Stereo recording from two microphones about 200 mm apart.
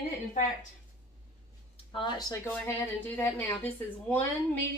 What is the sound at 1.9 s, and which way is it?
Speech, 25° left (ahead or behind).